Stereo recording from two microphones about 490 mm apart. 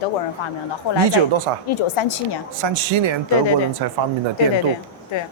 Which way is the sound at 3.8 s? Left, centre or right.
Right.